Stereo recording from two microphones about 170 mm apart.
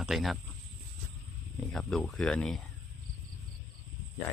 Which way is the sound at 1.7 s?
Centre (ahead or behind).